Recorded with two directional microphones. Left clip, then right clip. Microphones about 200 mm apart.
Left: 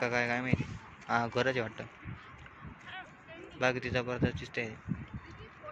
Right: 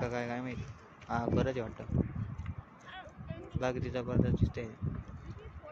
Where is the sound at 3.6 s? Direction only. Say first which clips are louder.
Left 4 dB; centre (ahead or behind).